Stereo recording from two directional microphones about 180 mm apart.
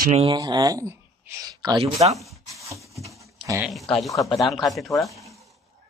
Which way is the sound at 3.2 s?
15° right (ahead or behind).